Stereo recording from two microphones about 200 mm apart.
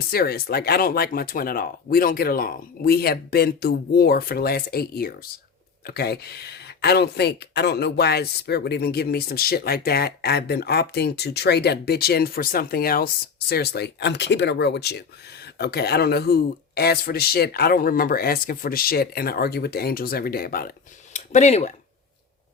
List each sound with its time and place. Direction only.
0.1 s speech: 50° left (ahead or behind)